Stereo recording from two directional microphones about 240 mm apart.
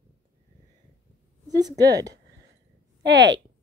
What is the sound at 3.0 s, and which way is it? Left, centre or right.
Speech, right.